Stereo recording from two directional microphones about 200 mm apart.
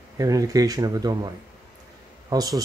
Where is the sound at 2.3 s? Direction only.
20° right (ahead or behind).